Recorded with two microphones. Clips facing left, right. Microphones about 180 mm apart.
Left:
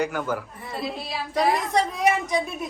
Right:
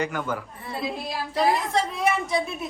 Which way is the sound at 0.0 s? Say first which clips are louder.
Left 2 dB; 5° left (ahead or behind).